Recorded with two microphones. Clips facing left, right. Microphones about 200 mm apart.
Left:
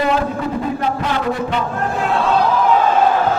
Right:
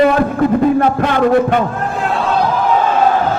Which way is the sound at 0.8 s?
55° right (ahead or behind).